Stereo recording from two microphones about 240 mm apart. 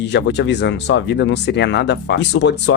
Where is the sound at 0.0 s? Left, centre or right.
Left.